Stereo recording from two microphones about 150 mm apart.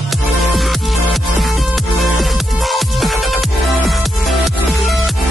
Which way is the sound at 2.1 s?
Centre (ahead or behind).